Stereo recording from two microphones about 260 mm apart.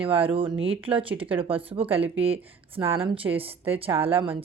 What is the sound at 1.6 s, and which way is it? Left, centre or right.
Speech, right.